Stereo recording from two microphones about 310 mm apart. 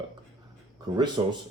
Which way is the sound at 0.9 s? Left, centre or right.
Centre.